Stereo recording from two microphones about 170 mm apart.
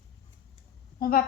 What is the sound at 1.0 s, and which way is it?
Speech, 60° left (ahead or behind).